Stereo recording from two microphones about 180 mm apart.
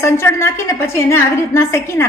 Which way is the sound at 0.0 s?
15° left (ahead or behind).